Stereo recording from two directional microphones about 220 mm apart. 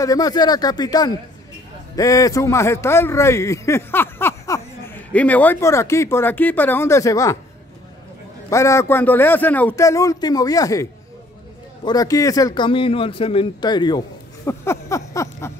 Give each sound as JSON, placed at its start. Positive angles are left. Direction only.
{"t": 0.0, "sound": "a man's voice", "side_deg": 15}
{"t": 8.5, "sound": "a man's voice", "side_deg": 15}